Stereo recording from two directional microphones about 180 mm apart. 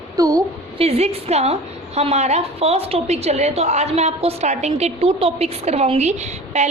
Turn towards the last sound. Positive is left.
turn(degrees=-40)  # may be behind; listen again after turning